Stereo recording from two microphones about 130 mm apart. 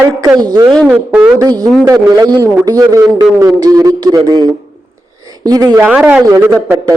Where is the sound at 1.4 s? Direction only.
30° right (ahead or behind).